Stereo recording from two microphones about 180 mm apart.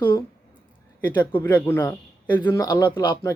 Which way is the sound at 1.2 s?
10° left (ahead or behind).